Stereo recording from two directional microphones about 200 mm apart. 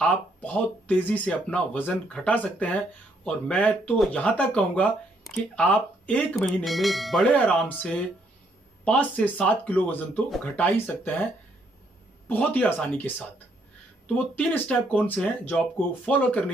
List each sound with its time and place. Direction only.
0.0 s speech: 5° left (ahead or behind)
12.3 s speech: 10° left (ahead or behind)